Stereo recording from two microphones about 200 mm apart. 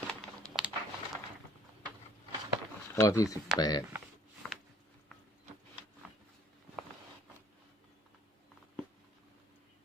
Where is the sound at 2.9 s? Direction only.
15° left (ahead or behind).